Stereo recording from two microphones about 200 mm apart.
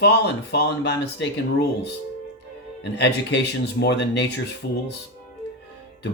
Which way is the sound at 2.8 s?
60° left (ahead or behind).